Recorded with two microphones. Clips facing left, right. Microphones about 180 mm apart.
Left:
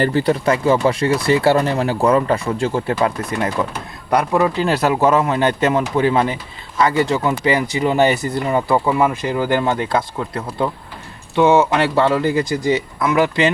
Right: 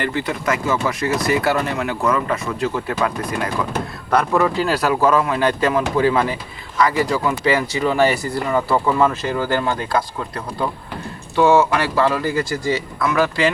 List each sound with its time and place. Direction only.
0.0 s speech: 35° left (ahead or behind)
4.1 s speech: 20° left (ahead or behind)